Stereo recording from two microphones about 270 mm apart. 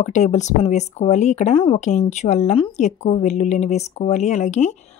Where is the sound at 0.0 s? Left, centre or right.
Left.